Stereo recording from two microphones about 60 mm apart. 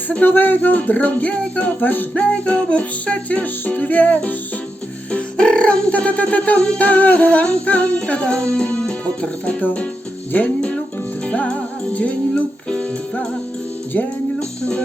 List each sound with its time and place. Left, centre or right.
0.1 s speech: left
11.3 s music: centre